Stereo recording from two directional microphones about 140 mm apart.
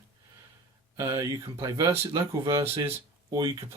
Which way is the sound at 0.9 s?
25° right (ahead or behind).